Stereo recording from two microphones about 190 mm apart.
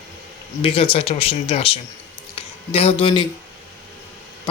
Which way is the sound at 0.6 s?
30° left (ahead or behind).